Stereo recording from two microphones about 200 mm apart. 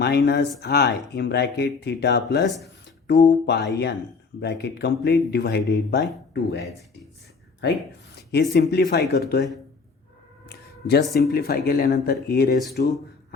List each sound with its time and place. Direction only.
0.0 s speech: 55° left (ahead or behind)
7.6 s speech: 60° left (ahead or behind)
8.1 s a sound: 55° left (ahead or behind)
8.5 s speech: 55° left (ahead or behind)
10.5 s a sound: 55° left (ahead or behind)
11.1 s speech: 50° left (ahead or behind)